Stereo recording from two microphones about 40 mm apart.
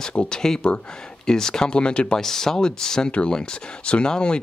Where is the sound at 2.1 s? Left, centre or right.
Centre.